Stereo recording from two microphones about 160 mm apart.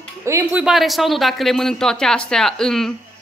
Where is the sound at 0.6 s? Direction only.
Centre (ahead or behind).